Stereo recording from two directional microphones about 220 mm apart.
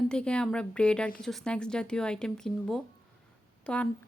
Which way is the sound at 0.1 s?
5° left (ahead or behind).